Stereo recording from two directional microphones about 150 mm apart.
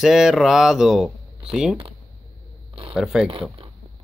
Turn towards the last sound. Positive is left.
turn(degrees=-5)  # may be behind; listen again after turning